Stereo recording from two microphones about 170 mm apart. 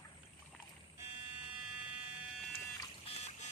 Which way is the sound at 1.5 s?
5° right (ahead or behind).